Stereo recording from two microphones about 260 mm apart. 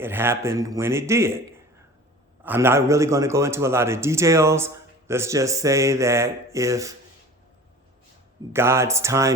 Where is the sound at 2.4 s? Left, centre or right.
Centre.